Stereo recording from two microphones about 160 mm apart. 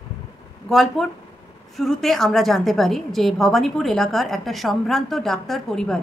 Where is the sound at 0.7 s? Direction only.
Centre (ahead or behind).